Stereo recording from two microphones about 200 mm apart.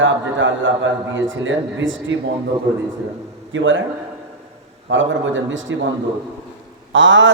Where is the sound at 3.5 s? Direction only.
70° right (ahead or behind).